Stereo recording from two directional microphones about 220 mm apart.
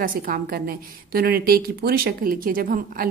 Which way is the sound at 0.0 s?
40° right (ahead or behind).